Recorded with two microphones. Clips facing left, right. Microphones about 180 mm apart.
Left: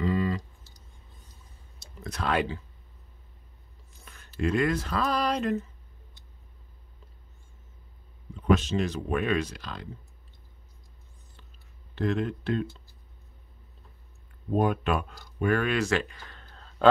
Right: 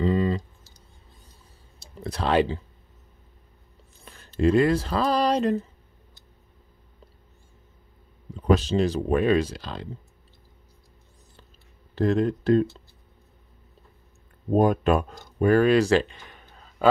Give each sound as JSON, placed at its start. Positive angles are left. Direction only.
{"t": 0.0, "sound": "clicking", "side_deg": -30}
{"t": 2.0, "sound": "speech", "side_deg": -30}
{"t": 4.0, "sound": "speech", "side_deg": -30}
{"t": 8.4, "sound": "speech", "side_deg": -35}
{"t": 11.9, "sound": "speech", "side_deg": -35}
{"t": 14.5, "sound": "speech", "side_deg": -40}
{"t": 16.2, "sound": "a sound", "side_deg": -15}